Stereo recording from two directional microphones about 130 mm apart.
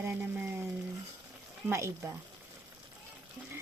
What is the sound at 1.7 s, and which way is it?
Speech, 20° right (ahead or behind).